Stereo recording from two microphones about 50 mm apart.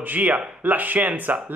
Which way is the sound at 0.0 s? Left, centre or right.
Right.